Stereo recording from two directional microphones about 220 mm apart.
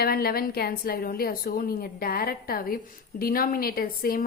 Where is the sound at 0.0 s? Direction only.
45° left (ahead or behind).